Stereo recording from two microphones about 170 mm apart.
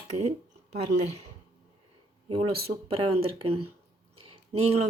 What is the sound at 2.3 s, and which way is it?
Speech, 35° right (ahead or behind).